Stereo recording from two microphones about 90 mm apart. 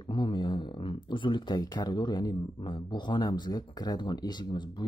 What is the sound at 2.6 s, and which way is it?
Speech, 60° left (ahead or behind).